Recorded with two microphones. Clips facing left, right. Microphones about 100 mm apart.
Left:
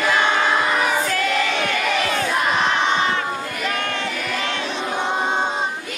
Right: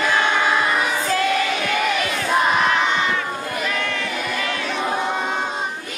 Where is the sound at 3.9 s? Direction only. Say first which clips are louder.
Even; 25° left (ahead or behind).